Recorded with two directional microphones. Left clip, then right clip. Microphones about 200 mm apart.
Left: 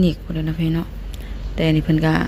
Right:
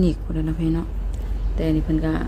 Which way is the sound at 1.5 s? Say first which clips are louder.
Left 3 dB; 20° left (ahead or behind).